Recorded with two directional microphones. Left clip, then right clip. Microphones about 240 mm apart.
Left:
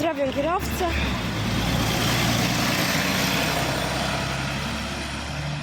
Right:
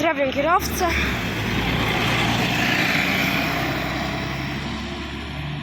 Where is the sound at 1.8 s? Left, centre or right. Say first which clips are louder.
Right 3 dB; left; by 5.0 s centre.